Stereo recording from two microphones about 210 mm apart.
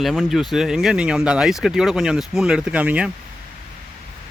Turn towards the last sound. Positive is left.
turn(degrees=-5)  # may be behind; listen again after turning